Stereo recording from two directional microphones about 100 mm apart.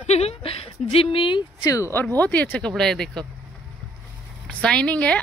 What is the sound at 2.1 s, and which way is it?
Speech, 15° left (ahead or behind).